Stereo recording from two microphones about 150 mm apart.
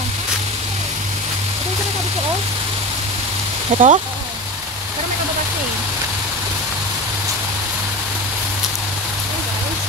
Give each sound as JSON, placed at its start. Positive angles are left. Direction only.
{"t": 3.7, "sound": "speech", "side_deg": -50}